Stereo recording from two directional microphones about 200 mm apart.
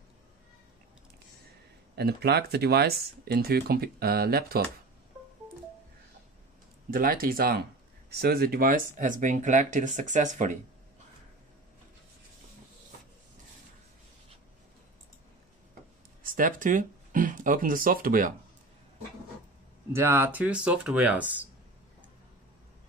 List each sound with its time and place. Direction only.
2.0 s speech: 55° right (ahead or behind)
6.9 s speech: 45° right (ahead or behind)
16.2 s speech: 45° right (ahead or behind)
19.9 s speech: 10° right (ahead or behind)